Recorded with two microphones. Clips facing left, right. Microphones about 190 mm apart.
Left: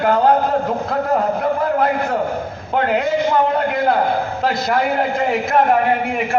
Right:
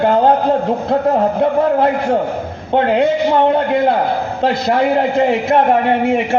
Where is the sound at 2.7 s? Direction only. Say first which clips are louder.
Right 5 dB; 30° right (ahead or behind).